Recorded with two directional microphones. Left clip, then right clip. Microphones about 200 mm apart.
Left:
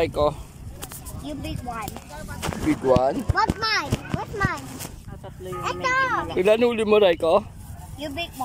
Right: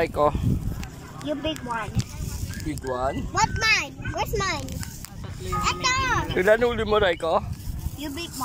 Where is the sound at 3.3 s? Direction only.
15° right (ahead or behind).